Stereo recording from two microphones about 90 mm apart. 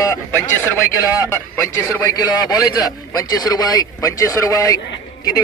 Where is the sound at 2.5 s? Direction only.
45° left (ahead or behind).